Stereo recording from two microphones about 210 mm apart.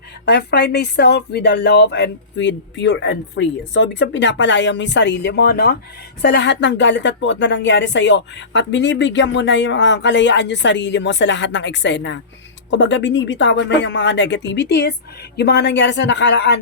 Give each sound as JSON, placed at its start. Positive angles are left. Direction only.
{"t": 0.3, "sound": "speech", "side_deg": 50}